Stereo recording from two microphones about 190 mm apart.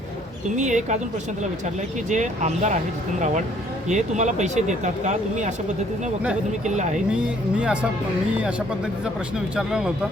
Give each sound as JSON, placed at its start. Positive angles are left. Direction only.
{"t": 0.5, "sound": "speech", "side_deg": -40}
{"t": 2.0, "sound": "speech", "side_deg": -40}
{"t": 3.8, "sound": "speech", "side_deg": -40}
{"t": 6.7, "sound": "speech", "side_deg": -40}
{"t": 7.1, "sound": "speech", "side_deg": -5}